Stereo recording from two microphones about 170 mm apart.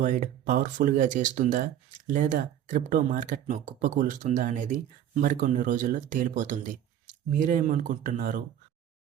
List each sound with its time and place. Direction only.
0.0 s speech: 50° right (ahead or behind)